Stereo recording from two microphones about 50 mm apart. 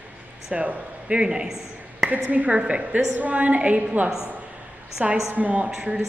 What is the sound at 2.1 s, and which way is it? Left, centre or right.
A woman's voice, right.